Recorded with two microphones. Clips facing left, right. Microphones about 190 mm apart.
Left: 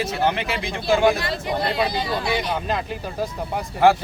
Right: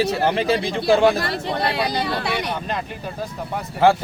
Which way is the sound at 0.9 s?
65° right (ahead or behind).